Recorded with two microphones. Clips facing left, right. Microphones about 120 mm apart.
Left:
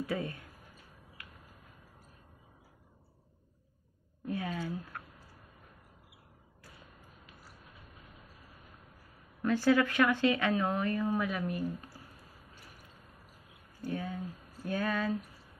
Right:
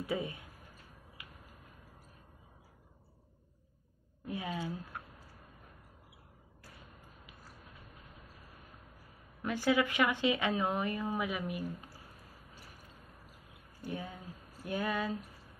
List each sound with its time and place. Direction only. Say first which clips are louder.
0.0 s speech: left 1 dB; 15° right (ahead or behind)
4.3 s a woman's voice: left 2 dB; 15° right (ahead or behind)
9.4 s speech: left 4 dB; 15° right (ahead or behind)
13.8 s speech: left 5 dB; 20° right (ahead or behind)